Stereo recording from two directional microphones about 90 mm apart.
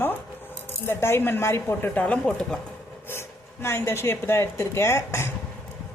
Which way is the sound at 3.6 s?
25° left (ahead or behind).